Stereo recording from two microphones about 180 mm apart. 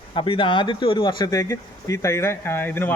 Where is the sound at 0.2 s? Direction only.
30° left (ahead or behind).